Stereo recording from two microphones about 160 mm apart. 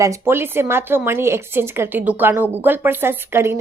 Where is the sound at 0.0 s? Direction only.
15° right (ahead or behind).